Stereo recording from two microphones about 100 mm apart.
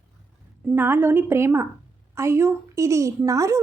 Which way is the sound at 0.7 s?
20° right (ahead or behind).